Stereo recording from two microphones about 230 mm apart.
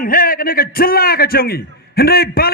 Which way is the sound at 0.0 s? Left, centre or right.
Left.